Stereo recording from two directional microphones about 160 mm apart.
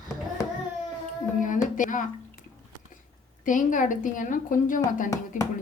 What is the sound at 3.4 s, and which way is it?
Speech, 55° left (ahead or behind).